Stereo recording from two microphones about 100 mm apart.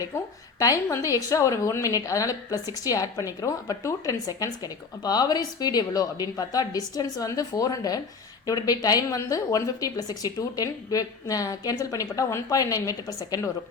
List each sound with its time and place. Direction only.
0.6 s a woman's voice: 35° left (ahead or behind)